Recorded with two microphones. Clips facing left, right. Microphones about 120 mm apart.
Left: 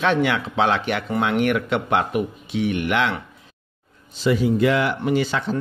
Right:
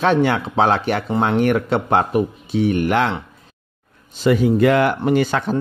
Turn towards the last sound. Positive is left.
turn(degrees=-50)  # may be behind; listen again after turning